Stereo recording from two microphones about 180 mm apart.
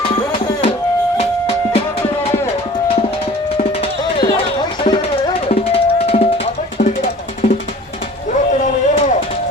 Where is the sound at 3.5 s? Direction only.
30° left (ahead or behind).